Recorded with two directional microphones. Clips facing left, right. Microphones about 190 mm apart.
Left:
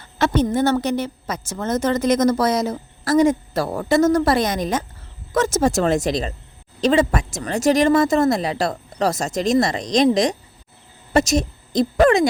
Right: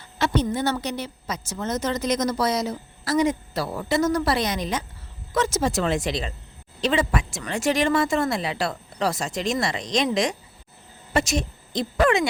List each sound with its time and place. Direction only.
0.2 s a woman's voice: 50° left (ahead or behind)